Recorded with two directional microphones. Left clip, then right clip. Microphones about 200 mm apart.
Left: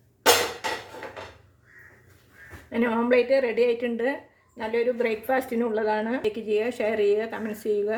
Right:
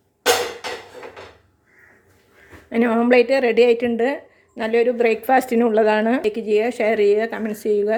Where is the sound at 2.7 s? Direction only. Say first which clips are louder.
Right 6 dB; 45° right (ahead or behind).